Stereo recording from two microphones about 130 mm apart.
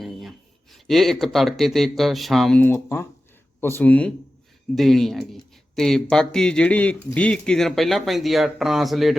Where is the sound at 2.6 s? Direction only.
15° left (ahead or behind).